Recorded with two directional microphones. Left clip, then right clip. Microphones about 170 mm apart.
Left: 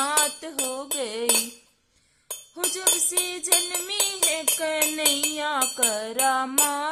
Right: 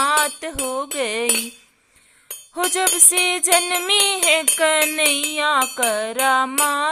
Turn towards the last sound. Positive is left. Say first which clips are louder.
# right 6 dB
turn(degrees=-15)  # may be behind; listen again after turning